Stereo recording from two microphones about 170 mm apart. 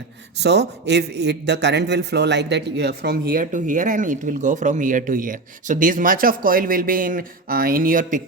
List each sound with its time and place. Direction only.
0.3 s a man's voice: 80° right; by 8.2 s 55° right (ahead or behind)